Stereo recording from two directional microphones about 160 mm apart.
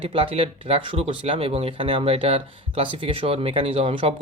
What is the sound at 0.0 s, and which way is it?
Speech, 35° right (ahead or behind).